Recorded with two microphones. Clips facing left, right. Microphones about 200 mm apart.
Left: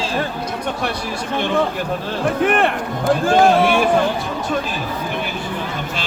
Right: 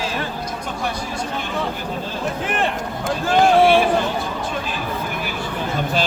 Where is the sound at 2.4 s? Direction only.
60° left (ahead or behind).